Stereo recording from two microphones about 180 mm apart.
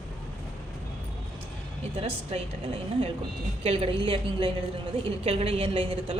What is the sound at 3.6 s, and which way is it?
A woman's voice, 30° right (ahead or behind).